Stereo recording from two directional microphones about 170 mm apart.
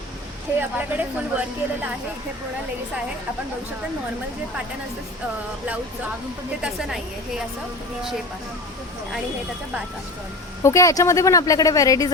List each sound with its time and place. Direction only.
0.6 s a woman's voice: 10° right (ahead or behind)
6.6 s a woman's voice: 5° right (ahead or behind)
10.6 s speech: 20° left (ahead or behind)